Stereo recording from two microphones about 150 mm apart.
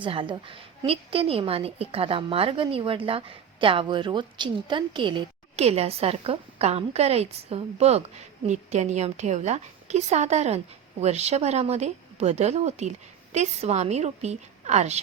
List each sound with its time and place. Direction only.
0.0 s a woman's voice: 35° right (ahead or behind)
5.6 s a woman's voice: 45° right (ahead or behind)